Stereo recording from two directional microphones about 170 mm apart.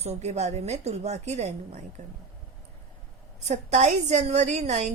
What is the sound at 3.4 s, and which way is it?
A woman's voice, 40° right (ahead or behind).